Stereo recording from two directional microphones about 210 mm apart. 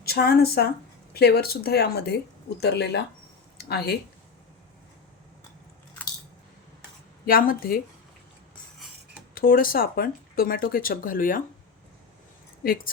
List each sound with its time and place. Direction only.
0.0 s speech: 50° left (ahead or behind)
7.3 s speech: 45° left (ahead or behind)
9.3 s speech: 45° left (ahead or behind)
12.6 s speech: 45° left (ahead or behind)